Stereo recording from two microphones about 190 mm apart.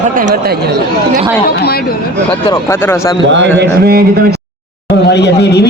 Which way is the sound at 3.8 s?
55° right (ahead or behind).